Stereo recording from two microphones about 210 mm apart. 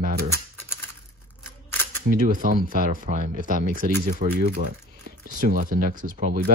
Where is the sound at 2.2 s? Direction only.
40° right (ahead or behind).